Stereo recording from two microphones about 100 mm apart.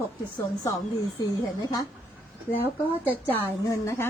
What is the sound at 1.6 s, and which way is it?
Speech, 40° left (ahead or behind).